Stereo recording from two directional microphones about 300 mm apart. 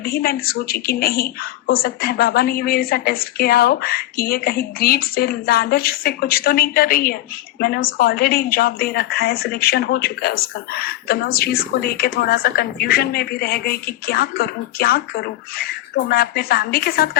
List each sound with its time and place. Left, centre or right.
0.0 s speech: left